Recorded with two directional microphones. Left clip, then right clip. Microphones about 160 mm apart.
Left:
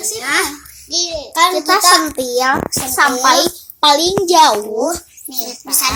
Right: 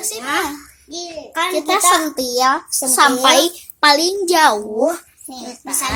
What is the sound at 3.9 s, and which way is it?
Speech, 50° right (ahead or behind).